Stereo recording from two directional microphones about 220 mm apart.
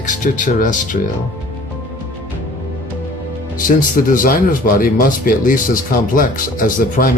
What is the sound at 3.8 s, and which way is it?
Speech, 40° left (ahead or behind).